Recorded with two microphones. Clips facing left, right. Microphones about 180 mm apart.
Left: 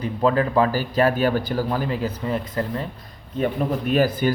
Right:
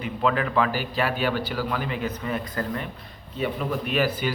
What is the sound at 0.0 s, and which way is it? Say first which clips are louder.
Speech: left 4 dB; 35° left (ahead or behind).